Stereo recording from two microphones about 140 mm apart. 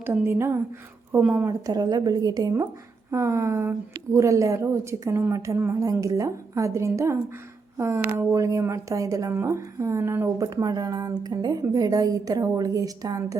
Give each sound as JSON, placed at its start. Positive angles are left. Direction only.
{"t": 0.0, "sound": "speech", "side_deg": -15}
{"t": 1.2, "sound": "speech", "side_deg": -5}
{"t": 1.5, "sound": "a woman's voice", "side_deg": -25}